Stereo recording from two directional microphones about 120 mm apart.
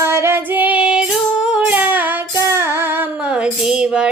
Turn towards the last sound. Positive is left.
turn(degrees=-5)  # may be behind; listen again after turning